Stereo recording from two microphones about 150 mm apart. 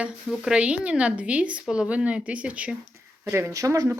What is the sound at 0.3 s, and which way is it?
Speech, 5° right (ahead or behind).